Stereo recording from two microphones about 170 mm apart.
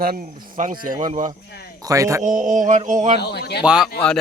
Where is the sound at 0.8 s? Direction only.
55° right (ahead or behind).